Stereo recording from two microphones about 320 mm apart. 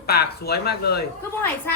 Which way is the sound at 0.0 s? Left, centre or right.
Left.